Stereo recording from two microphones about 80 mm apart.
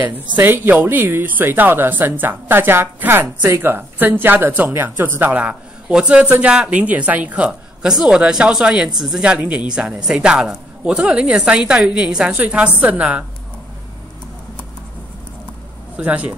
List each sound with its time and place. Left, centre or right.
0.0 s a woman's voice: right; by 9.2 s centre
9.2 s a woman's voice: centre
16.0 s speech: centre